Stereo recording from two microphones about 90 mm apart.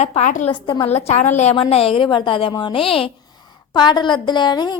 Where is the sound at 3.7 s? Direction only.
55° left (ahead or behind).